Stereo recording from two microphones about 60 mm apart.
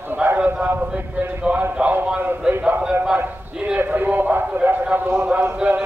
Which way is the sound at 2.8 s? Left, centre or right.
Centre.